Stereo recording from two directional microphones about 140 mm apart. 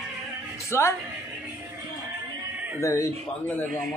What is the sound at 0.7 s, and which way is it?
Speech, 20° left (ahead or behind).